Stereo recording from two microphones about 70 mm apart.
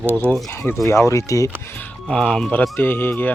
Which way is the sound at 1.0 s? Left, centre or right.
Left.